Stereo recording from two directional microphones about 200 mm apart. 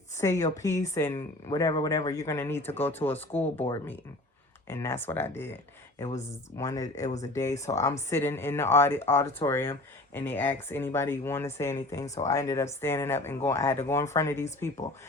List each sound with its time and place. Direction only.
0.2 s speech: 15° left (ahead or behind)
4.7 s speech: 10° left (ahead or behind)
6.6 s speech: 15° left (ahead or behind)
12.0 s speech: 35° left (ahead or behind)
12.3 s speech: 15° left (ahead or behind)